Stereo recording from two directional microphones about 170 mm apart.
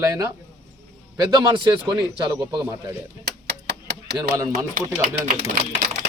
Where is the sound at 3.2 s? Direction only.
80° right.